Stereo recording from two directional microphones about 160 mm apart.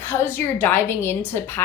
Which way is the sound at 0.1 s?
15° left (ahead or behind).